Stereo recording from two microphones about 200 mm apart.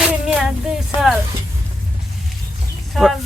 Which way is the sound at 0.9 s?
25° left (ahead or behind).